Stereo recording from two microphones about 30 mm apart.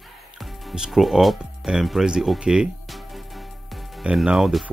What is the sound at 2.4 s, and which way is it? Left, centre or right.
Speech, right.